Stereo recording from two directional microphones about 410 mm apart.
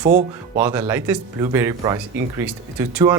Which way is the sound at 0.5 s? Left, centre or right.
Centre.